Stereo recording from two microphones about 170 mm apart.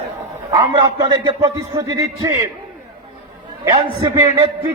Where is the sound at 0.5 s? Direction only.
25° right (ahead or behind).